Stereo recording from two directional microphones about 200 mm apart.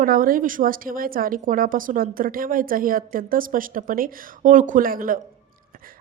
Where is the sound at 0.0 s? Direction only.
45° right (ahead or behind).